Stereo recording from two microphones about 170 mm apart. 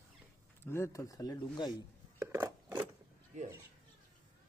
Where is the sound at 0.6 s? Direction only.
15° left (ahead or behind).